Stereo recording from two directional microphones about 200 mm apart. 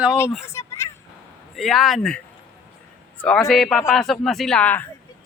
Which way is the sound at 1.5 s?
Centre (ahead or behind).